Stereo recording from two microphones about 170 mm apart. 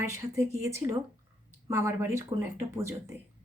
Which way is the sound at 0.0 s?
15° right (ahead or behind).